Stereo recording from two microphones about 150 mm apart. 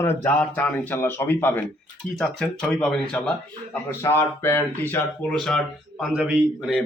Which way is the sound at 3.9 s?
15° left (ahead or behind).